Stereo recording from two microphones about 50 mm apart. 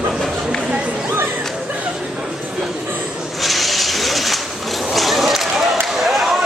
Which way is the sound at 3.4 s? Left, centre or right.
Centre.